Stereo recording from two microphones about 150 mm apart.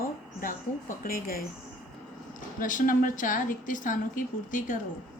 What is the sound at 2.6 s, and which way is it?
A woman's voice, 65° left (ahead or behind).